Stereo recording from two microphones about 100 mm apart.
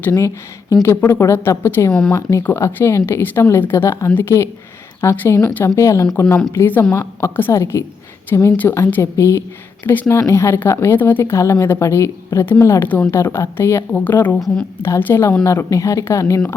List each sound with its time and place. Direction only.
0.0 s speech: 25° left (ahead or behind)
1.9 s speech: 10° left (ahead or behind)
2.1 s speech: 25° left (ahead or behind)
14.3 s a woman's voice: centre (ahead or behind)
14.8 s speech: 25° left (ahead or behind)